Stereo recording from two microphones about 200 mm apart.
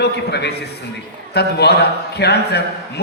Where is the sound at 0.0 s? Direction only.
55° left (ahead or behind).